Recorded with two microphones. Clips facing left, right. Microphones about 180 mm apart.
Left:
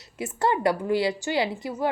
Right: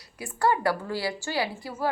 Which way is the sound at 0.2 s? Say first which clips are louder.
Left 1 dB; 20° left (ahead or behind).